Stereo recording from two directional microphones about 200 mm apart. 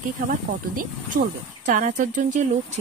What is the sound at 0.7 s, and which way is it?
Speech, 40° right (ahead or behind).